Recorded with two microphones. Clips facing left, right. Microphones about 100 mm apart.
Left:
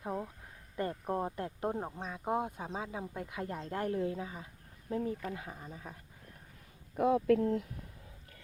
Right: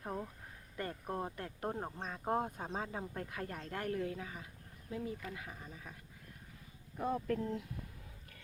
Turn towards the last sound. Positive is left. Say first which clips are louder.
# left 9 dB
turn(degrees=60)  # may be behind; listen again after turning